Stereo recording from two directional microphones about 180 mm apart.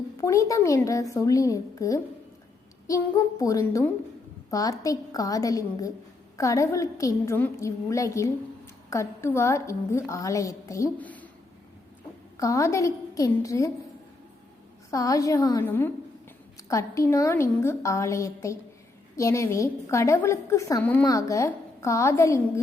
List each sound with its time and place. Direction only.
0.2 s a woman's voice: 15° left (ahead or behind)
12.4 s a woman's voice: 15° left (ahead or behind)
14.8 s a woman's voice: 20° left (ahead or behind)